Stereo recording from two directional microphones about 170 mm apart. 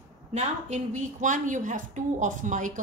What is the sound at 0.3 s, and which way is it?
Speech, 45° right (ahead or behind).